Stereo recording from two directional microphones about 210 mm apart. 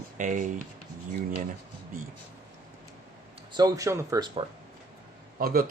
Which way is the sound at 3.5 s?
15° right (ahead or behind).